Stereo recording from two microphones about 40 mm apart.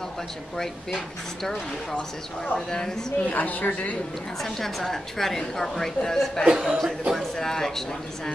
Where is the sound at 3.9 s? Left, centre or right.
Centre.